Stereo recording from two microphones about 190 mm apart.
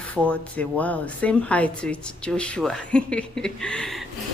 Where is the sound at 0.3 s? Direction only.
10° left (ahead or behind).